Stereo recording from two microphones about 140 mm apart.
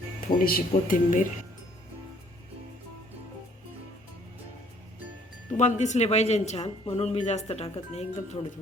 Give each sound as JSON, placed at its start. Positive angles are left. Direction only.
{"t": 0.4, "sound": "speech", "side_deg": 85}
{"t": 5.5, "sound": "speech", "side_deg": 55}